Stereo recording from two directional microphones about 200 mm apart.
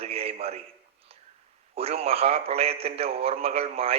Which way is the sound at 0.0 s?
30° right (ahead or behind).